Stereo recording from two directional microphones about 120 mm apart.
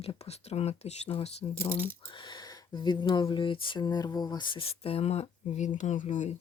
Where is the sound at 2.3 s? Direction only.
40° left (ahead or behind).